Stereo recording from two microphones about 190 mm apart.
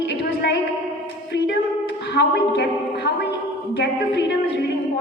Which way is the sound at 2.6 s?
65° left (ahead or behind).